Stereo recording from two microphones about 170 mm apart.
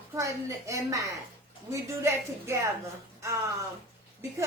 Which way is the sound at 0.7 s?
20° right (ahead or behind).